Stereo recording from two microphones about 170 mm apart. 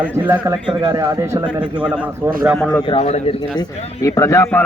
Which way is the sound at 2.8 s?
35° left (ahead or behind).